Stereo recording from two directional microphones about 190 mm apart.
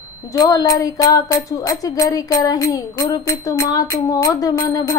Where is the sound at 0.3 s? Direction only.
20° left (ahead or behind).